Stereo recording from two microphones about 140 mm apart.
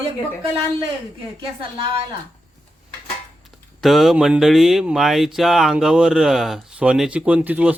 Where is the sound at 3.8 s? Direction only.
Centre (ahead or behind).